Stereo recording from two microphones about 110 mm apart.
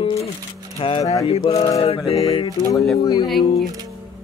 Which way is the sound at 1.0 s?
30° left (ahead or behind).